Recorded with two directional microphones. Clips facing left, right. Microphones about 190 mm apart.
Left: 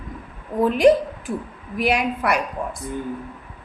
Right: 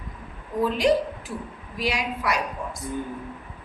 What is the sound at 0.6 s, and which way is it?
A woman's voice, 55° left (ahead or behind).